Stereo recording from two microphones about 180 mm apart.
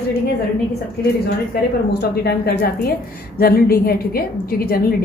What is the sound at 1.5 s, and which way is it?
A woman's voice, 65° left (ahead or behind).